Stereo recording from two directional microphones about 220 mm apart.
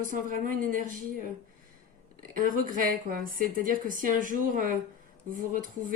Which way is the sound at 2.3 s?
35° right (ahead or behind).